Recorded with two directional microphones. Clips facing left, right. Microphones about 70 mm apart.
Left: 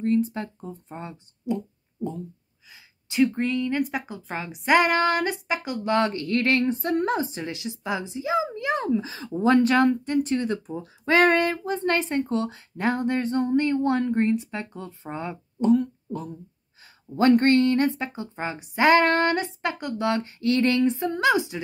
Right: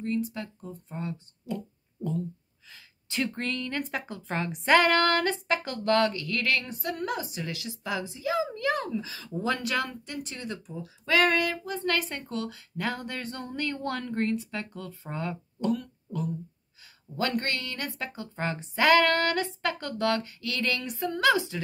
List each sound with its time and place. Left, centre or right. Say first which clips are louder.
0.0 s a child's voice: left 7 dB; left
2.7 s a sound: left 3 dB; centre
3.3 s a woman's voice: left 7 dB; centre
4.7 s a woman's voice: left 2 dB; centre
5.9 s a child's voice: left 6 dB; left
7.5 s a child's voice: left 3 dB; left